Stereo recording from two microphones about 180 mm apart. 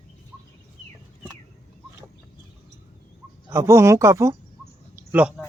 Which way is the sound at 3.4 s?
15° right (ahead or behind).